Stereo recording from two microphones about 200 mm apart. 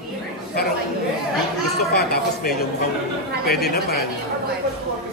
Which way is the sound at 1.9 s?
50° left (ahead or behind).